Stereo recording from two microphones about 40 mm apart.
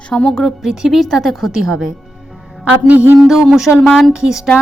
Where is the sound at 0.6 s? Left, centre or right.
Centre.